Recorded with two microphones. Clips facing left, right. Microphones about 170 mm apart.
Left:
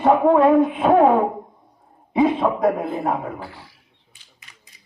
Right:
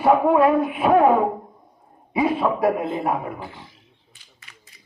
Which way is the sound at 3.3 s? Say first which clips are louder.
Left 1 dB; 20° right (ahead or behind).